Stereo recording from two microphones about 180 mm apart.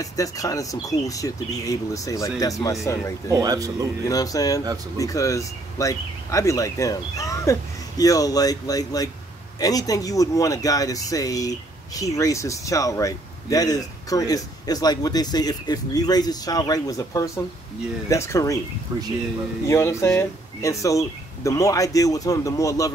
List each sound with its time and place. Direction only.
0.0 s speech: 20° left (ahead or behind)
3.3 s speech: 20° right (ahead or behind)
4.1 s speech: 20° left (ahead or behind)
19.7 s speech: 15° left (ahead or behind)